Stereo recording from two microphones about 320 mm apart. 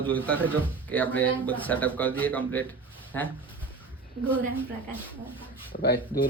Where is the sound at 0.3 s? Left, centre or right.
Centre.